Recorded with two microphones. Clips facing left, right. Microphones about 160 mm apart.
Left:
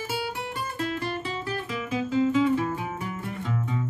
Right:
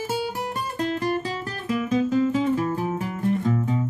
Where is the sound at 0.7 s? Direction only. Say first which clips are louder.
Right 5 dB; 40° right (ahead or behind).